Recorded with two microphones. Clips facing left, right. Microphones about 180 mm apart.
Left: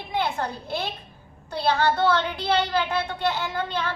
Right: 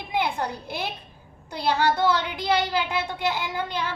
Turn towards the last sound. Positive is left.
turn(degrees=-10)  # may be behind; listen again after turning